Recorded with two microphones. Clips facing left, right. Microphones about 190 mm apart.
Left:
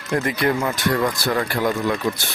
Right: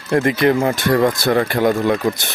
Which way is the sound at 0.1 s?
25° right (ahead or behind).